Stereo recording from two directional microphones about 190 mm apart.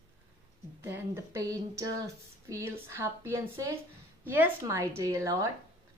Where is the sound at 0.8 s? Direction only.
15° right (ahead or behind).